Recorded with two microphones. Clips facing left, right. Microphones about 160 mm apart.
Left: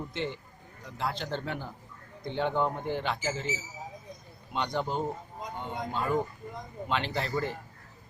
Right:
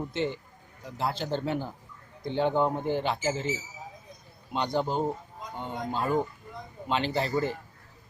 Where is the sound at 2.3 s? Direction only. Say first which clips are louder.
Right 4 dB; 30° right (ahead or behind).